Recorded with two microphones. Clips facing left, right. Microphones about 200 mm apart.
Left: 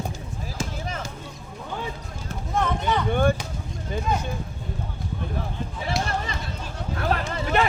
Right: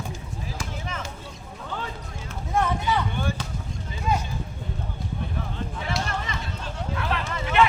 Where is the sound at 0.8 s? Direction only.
35° left (ahead or behind).